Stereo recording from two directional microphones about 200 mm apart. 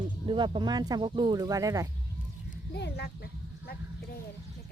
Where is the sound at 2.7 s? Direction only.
60° left (ahead or behind).